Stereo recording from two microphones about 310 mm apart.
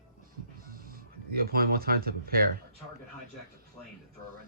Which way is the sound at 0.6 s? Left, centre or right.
Right.